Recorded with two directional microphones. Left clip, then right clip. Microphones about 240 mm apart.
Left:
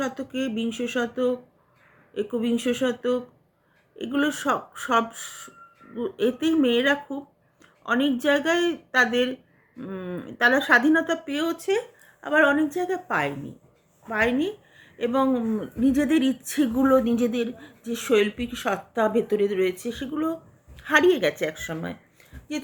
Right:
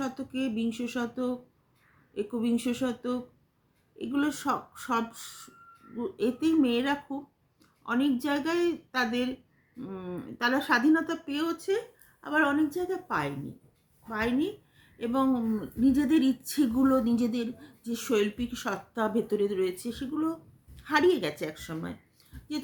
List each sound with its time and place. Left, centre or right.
0.0 s a woman's voice: centre